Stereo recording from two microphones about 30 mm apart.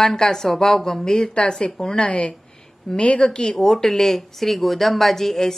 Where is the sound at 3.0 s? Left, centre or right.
Left; by 4.2 s centre.